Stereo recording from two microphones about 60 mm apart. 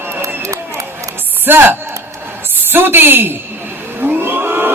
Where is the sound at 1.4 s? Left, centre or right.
Right.